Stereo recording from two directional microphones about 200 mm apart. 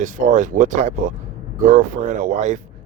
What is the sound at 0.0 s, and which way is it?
Speech, 40° right (ahead or behind).